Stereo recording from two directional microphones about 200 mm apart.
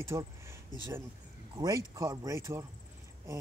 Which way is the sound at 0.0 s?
15° right (ahead or behind).